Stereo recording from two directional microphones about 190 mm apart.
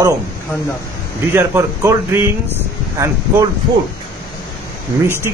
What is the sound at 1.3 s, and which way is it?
Speech, 15° right (ahead or behind).